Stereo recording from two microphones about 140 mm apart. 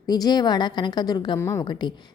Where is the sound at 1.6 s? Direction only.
30° left (ahead or behind).